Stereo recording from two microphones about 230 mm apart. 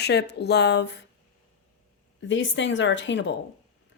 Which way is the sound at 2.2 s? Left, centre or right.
Left.